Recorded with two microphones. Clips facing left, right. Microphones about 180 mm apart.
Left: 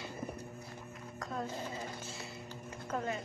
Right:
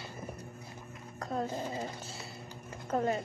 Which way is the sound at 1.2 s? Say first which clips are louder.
Right 5 dB; 35° right (ahead or behind).